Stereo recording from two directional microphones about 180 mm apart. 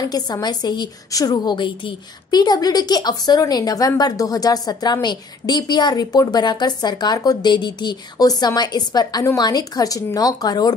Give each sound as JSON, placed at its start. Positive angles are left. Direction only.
{"t": 0.1, "sound": "a woman's voice", "side_deg": 20}